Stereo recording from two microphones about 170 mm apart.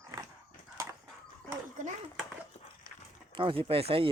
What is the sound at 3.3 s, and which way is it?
Speech, 30° right (ahead or behind).